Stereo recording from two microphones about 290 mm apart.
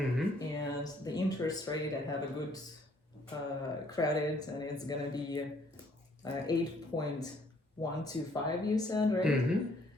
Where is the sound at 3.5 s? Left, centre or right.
Centre.